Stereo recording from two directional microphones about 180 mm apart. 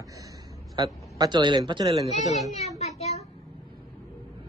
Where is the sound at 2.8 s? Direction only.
35° left (ahead or behind).